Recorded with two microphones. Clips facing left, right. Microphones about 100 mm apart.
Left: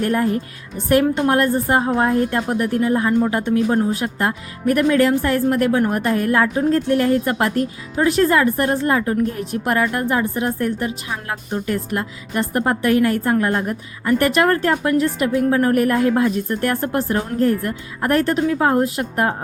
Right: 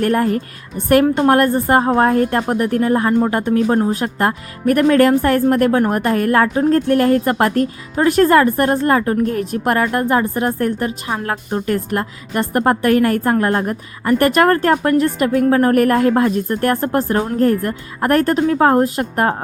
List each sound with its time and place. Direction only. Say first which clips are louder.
0.0 s a woman's voice: right 3 dB; 55° right (ahead or behind)